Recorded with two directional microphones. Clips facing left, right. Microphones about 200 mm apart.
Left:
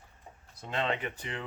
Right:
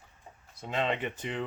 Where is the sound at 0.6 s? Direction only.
5° right (ahead or behind).